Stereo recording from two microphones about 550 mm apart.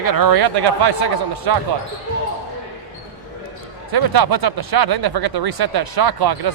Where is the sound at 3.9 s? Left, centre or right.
Right.